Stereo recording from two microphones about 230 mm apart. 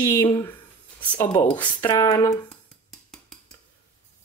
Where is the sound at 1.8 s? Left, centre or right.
Centre.